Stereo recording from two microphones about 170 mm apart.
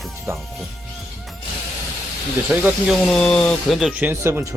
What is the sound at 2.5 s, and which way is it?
Speech, 10° right (ahead or behind).